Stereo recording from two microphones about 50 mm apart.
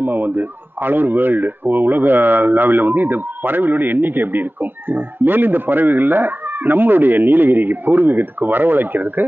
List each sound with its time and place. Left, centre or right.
0.0 s speech: right